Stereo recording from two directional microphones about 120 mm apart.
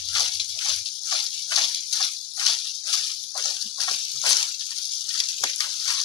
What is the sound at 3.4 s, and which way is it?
Dog, 40° left (ahead or behind).